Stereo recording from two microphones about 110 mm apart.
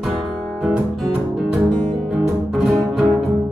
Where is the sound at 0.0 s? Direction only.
5° right (ahead or behind).